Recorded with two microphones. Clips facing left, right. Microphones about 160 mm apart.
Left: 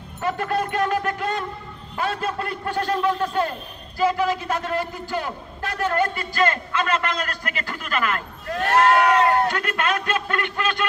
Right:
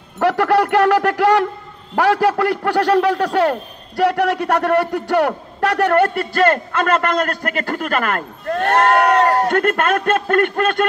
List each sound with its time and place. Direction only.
0.2 s a man's voice: 75° right (ahead or behind); by 9.5 s 40° right (ahead or behind)
9.5 s a man's voice: 50° right (ahead or behind)